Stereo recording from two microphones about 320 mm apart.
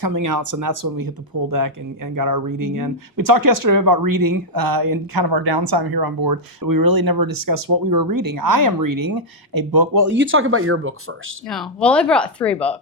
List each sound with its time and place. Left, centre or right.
0.0 s speech: right
10.1 s speech: right
11.4 s speech: centre